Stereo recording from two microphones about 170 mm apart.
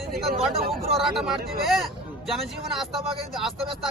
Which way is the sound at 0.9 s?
Centre (ahead or behind).